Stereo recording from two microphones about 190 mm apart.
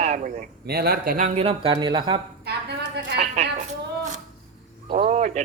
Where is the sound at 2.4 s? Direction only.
60° right (ahead or behind).